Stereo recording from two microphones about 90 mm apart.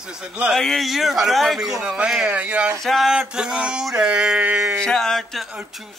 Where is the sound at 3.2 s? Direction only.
10° right (ahead or behind).